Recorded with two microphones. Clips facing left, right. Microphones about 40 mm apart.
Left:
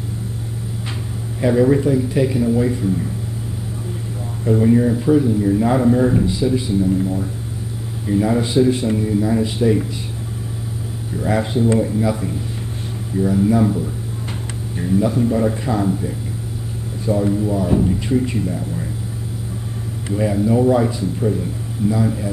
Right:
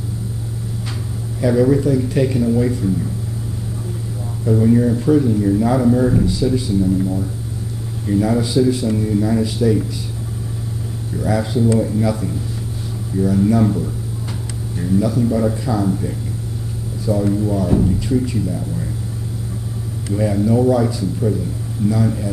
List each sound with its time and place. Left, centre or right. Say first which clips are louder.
1.4 s a man's voice: even; left
2.0 s speech: even; centre
4.5 s a man's voice: even; left
4.7 s speech: even; centre
5.5 s a man's voice: even; left
8.4 s speech: even; left
8.9 s speech: even; centre
9.4 s a man's voice: even; left
11.2 s speech: even; left
11.8 s a man's voice: even; centre
14.8 s a man's voice: even; left
17.1 s a man's voice: even; left
17.4 s a man's voice: even; centre
20.2 s a man's voice: even; centre